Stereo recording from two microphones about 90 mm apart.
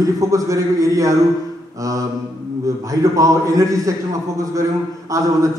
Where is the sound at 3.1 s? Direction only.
35° right (ahead or behind).